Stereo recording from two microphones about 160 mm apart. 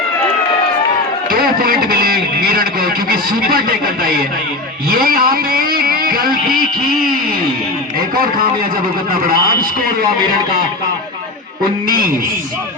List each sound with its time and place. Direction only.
1.3 s speech: 65° right (ahead or behind)
4.9 s a sound: 65° right (ahead or behind)
11.9 s a man's voice: 65° right (ahead or behind)